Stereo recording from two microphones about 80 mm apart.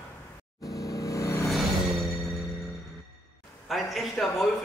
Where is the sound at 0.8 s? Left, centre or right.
Left.